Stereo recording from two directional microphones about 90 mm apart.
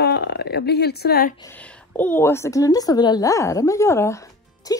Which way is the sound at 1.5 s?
15° left (ahead or behind).